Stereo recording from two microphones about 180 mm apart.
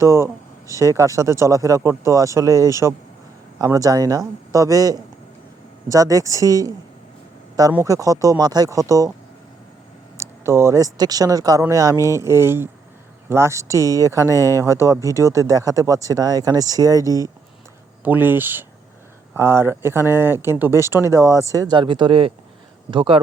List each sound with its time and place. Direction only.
0.0 s speech: 15° right (ahead or behind)
7.9 s speech: 20° right (ahead or behind)
10.2 s speech: 15° right (ahead or behind)
14.4 s speech: 15° left (ahead or behind)
14.7 s speech: 15° right (ahead or behind)